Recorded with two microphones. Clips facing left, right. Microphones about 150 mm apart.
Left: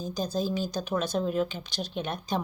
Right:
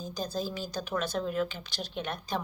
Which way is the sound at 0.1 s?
15° left (ahead or behind).